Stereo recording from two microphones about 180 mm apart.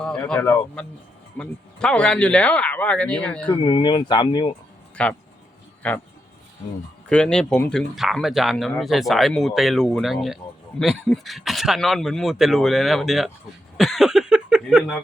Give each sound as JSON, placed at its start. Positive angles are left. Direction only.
{"t": 0.0, "sound": "speech", "side_deg": 5}
{"t": 3.5, "sound": "speech", "side_deg": 30}
{"t": 5.0, "sound": "speech", "side_deg": 5}
{"t": 7.1, "sound": "speech", "side_deg": 5}
{"t": 13.7, "sound": "a sound", "side_deg": 0}